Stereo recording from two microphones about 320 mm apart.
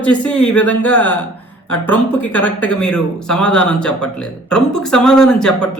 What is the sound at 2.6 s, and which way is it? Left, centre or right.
A man's voice, centre.